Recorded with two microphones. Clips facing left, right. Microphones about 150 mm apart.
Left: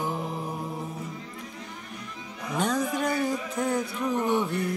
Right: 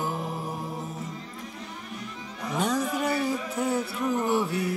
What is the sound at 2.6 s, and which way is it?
A man's voice, 5° right (ahead or behind).